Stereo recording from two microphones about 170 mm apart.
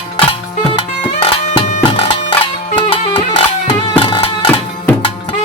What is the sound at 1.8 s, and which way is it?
Bagpipes, 35° left (ahead or behind).